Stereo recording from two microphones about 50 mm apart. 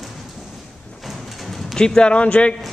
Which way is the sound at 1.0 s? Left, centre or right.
Centre.